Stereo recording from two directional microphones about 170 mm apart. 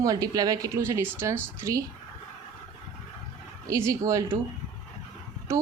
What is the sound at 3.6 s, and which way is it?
Speech, 20° right (ahead or behind).